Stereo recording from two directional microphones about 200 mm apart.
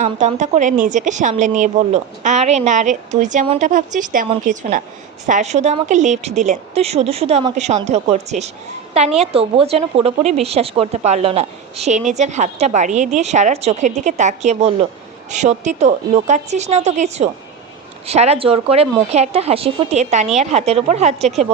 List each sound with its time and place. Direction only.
0.0 s a woman's voice: 35° right (ahead or behind)